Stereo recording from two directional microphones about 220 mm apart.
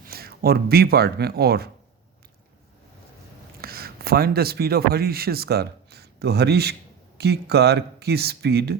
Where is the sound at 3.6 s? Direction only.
45° right (ahead or behind).